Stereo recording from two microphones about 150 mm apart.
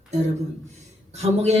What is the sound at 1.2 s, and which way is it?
Speech, 45° right (ahead or behind).